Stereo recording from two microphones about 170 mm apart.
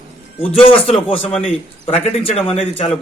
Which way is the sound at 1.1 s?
Centre (ahead or behind).